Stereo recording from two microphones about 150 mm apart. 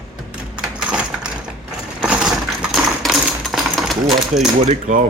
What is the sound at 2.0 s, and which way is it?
Coin, 5° right (ahead or behind).